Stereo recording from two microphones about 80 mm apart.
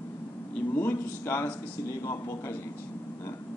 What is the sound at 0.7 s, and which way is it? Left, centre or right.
Speech, left.